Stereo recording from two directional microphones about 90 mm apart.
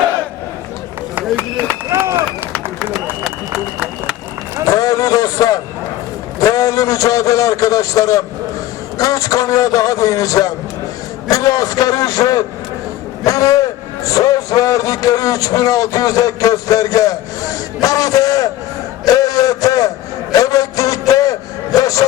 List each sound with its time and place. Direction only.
1.9 s run: 30° right (ahead or behind)
2.9 s run: centre (ahead or behind)
4.6 s a sound: 40° left (ahead or behind)
6.4 s a man's voice: 40° left (ahead or behind)
19.0 s a sound: 40° left (ahead or behind)
21.8 s music: 40° left (ahead or behind)